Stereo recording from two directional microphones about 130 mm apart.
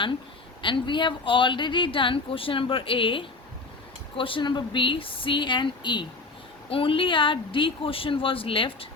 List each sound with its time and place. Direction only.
0.6 s speech: 40° left (ahead or behind)